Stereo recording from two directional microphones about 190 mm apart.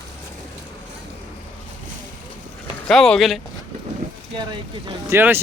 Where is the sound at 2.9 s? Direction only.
Centre (ahead or behind).